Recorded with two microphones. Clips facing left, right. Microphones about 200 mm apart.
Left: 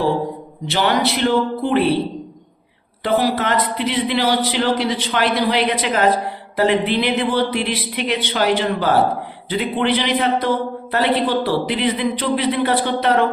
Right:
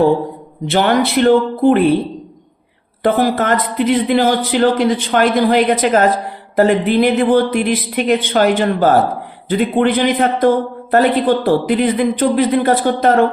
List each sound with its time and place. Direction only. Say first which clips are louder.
0.7 s a man's voice: right 5 dB; 50° right (ahead or behind)
3.0 s a man's voice: right 4 dB; 50° right (ahead or behind)